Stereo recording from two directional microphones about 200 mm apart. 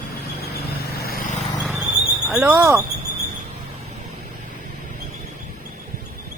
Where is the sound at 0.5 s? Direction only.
50° left (ahead or behind).